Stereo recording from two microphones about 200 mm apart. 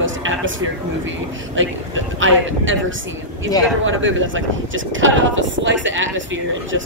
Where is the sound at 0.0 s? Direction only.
75° right (ahead or behind).